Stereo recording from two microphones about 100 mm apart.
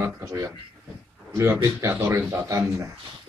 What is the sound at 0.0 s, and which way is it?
A man's voice, 35° right (ahead or behind).